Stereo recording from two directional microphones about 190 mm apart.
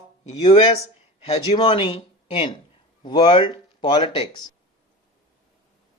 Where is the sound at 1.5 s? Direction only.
25° left (ahead or behind).